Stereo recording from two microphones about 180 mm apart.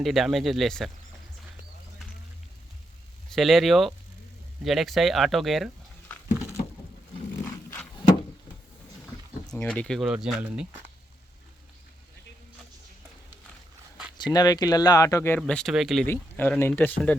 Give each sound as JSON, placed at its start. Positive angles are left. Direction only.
{"t": 0.0, "sound": "speech", "side_deg": 0}
{"t": 3.2, "sound": "speech", "side_deg": 0}
{"t": 7.4, "sound": "dog", "side_deg": 10}
{"t": 9.5, "sound": "speech", "side_deg": 10}
{"t": 14.2, "sound": "speech", "side_deg": 20}
{"t": 15.4, "sound": "speech", "side_deg": 5}
{"t": 16.0, "sound": "speech", "side_deg": 10}